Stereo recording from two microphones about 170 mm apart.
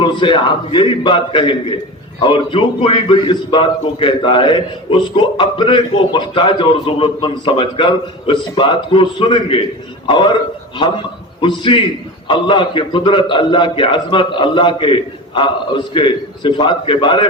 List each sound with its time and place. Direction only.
0.0 s a man's voice: 30° left (ahead or behind)